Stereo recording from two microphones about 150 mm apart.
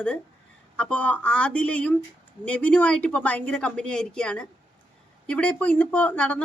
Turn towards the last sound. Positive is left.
turn(degrees=10)  # may be behind; listen again after turning